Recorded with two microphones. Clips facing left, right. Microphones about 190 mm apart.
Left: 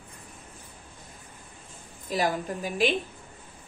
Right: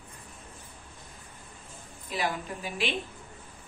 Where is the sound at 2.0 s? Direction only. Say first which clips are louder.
Left 5 dB; 40° left (ahead or behind).